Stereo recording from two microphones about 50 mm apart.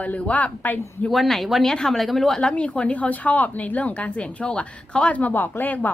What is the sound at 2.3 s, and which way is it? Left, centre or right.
Speech, left.